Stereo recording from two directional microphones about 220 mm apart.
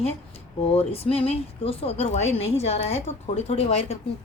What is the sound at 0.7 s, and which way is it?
A woman's voice, 25° left (ahead or behind).